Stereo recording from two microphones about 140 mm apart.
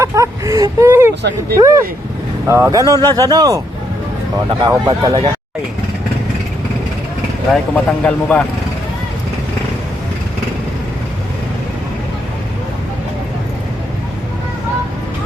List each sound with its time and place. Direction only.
0.0 s vehicle: 20° right (ahead or behind)
1.5 s speech: 20° right (ahead or behind)
7.5 s speech: 10° left (ahead or behind)